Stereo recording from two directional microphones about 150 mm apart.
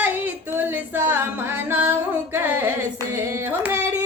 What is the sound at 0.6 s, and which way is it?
Music, 10° right (ahead or behind).